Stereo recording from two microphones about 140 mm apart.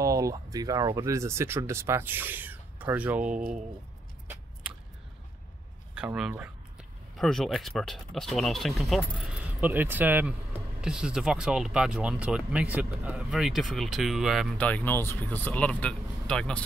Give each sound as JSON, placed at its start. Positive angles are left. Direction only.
{"t": 0.0, "sound": "speech", "side_deg": -25}
{"t": 3.3, "sound": "speech", "side_deg": -70}
{"t": 5.9, "sound": "speech", "side_deg": -5}
{"t": 9.6, "sound": "speech", "side_deg": -15}
{"t": 14.6, "sound": "speech", "side_deg": 10}